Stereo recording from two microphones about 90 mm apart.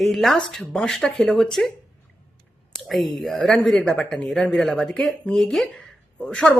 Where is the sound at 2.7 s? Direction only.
Centre (ahead or behind).